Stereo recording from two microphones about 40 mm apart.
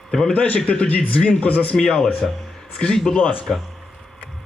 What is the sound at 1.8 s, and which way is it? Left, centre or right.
A man's voice, centre.